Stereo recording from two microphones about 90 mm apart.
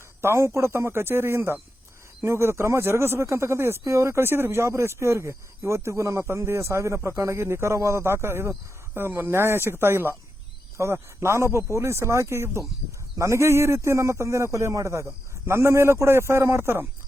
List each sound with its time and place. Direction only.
0.2 s speech: 30° right (ahead or behind)